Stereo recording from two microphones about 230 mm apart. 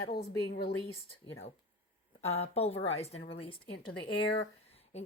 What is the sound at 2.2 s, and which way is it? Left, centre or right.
Speech, left.